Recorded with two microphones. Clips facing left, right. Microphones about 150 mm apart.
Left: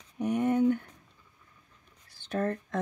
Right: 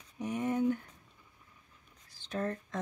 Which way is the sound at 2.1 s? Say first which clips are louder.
Left 5 dB; 60° left (ahead or behind).